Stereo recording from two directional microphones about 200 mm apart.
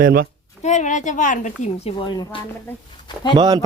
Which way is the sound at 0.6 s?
35° left (ahead or behind).